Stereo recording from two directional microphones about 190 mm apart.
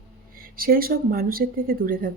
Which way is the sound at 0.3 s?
50° right (ahead or behind).